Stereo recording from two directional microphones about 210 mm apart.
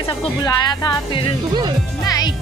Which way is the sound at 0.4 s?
20° left (ahead or behind).